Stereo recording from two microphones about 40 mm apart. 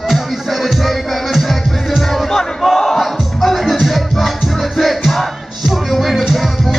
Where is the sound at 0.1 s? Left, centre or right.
Centre.